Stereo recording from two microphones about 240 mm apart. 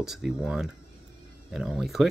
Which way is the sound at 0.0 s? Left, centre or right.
Centre.